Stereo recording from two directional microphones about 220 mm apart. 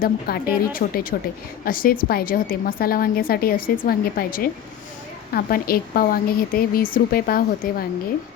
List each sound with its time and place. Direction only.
0.0 s a woman's voice: 45° left (ahead or behind)